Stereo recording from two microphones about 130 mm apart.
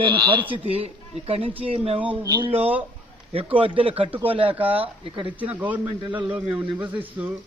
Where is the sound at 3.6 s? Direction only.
40° right (ahead or behind).